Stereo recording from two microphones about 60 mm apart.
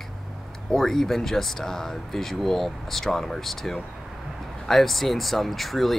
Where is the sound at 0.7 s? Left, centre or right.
Centre.